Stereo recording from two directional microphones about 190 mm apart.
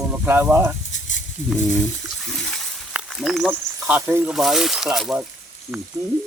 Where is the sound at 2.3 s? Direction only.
5° right (ahead or behind).